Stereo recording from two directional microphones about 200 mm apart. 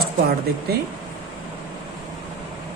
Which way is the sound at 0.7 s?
50° right (ahead or behind).